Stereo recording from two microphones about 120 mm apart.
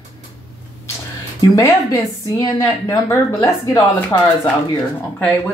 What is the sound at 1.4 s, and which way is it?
Speech, 25° left (ahead or behind).